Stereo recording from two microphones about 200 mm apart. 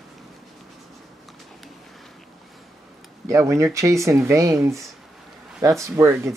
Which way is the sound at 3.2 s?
15° right (ahead or behind).